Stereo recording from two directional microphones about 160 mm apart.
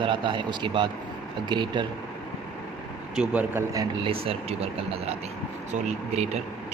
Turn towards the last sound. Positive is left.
turn(degrees=-45)  # may be behind; listen again after turning